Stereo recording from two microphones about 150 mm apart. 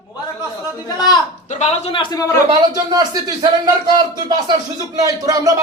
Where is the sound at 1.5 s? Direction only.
45° left (ahead or behind).